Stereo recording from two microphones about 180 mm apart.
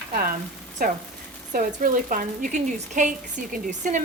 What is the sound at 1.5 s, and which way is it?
A woman's voice, 45° right (ahead or behind).